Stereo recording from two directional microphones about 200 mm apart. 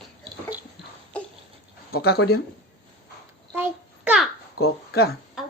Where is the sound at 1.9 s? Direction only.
50° left (ahead or behind).